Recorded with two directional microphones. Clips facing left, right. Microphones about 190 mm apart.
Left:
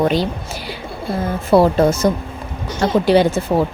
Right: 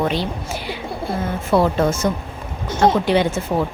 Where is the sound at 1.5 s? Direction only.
35° left (ahead or behind).